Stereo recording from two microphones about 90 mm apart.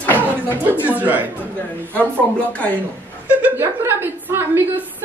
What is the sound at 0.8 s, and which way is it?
Speech, 20° right (ahead or behind).